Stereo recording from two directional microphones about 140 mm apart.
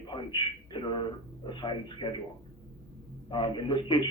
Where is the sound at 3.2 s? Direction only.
35° left (ahead or behind).